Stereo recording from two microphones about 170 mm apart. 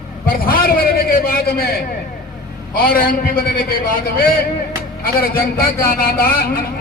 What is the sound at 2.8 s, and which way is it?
Speech, 55° left (ahead or behind).